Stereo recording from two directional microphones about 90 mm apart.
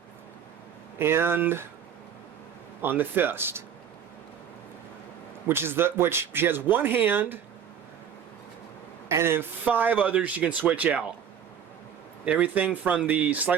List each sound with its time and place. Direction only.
0.9 s speech: 25° right (ahead or behind)
2.8 s speech: 20° right (ahead or behind)
5.5 s speech: 25° right (ahead or behind)
9.0 s speech: 30° right (ahead or behind)
12.2 s speech: 15° right (ahead or behind)